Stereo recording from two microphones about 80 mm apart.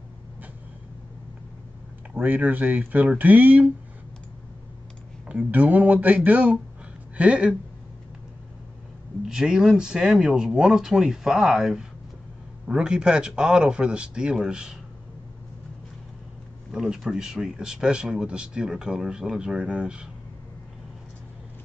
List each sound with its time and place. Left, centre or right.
2.1 s speech: right
5.3 s speech: centre
9.2 s speech: centre
16.7 s speech: centre